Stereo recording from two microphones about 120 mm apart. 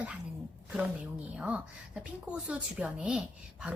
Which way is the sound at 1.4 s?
10° right (ahead or behind).